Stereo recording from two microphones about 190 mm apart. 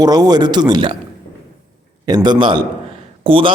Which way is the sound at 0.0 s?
20° right (ahead or behind).